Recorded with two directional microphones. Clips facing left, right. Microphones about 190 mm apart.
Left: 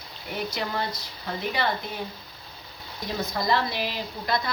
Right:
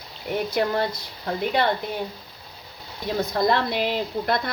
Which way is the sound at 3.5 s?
60° right (ahead or behind).